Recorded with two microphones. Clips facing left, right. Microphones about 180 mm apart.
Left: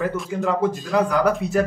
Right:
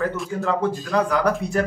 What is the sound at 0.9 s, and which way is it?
Speech, centre (ahead or behind).